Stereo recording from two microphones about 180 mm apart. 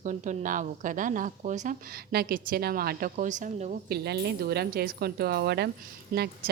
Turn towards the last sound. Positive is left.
turn(degrees=-55)  # may be behind; listen again after turning